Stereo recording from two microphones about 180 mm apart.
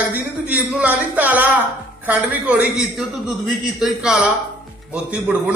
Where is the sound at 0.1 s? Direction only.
10° right (ahead or behind).